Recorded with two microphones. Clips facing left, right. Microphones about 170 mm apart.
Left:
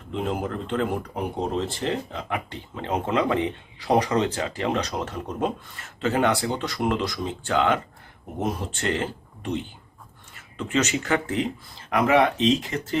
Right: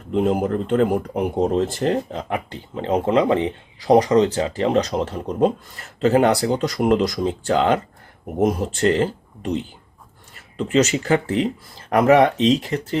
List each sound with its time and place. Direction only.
0.1 s speech: 40° right (ahead or behind)
10.6 s speech: 35° right (ahead or behind)